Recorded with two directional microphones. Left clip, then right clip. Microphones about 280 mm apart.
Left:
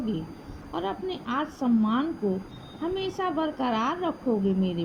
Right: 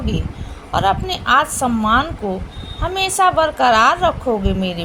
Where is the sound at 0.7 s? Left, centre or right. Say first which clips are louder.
Right 14 dB; left.